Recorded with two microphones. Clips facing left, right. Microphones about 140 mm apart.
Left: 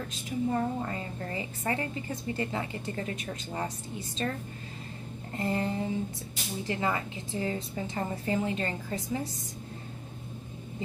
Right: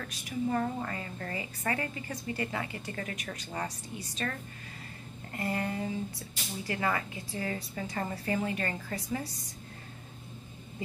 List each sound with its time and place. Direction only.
0.0 s a woman's voice: 25° left (ahead or behind)
5.3 s a woman's voice: 25° left (ahead or behind)